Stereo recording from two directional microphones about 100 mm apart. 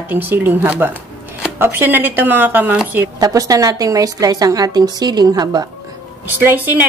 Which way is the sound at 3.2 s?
35° right (ahead or behind).